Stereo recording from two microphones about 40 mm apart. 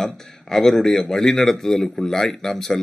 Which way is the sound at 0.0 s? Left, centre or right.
Centre.